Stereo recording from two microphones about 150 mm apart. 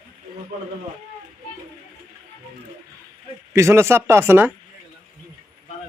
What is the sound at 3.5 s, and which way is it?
Speech, 20° right (ahead or behind).